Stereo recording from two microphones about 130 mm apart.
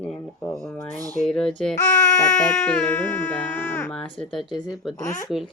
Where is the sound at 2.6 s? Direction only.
15° left (ahead or behind).